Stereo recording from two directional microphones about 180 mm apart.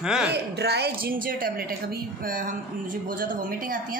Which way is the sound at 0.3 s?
65° right (ahead or behind).